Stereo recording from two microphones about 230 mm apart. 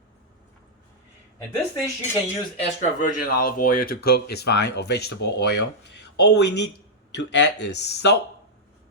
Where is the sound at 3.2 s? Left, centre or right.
Left.